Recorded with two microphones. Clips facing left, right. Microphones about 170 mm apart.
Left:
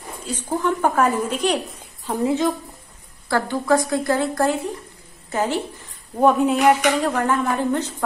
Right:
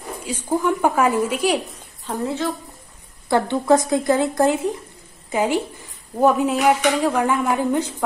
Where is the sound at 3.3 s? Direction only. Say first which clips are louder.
Right 3 dB; 20° right (ahead or behind).